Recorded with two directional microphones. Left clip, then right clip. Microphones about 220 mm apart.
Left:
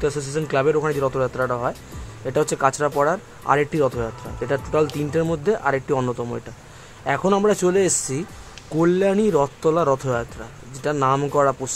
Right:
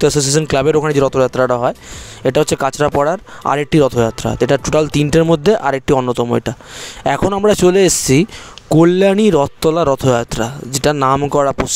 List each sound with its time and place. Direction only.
0.0 s speech: 50° right (ahead or behind)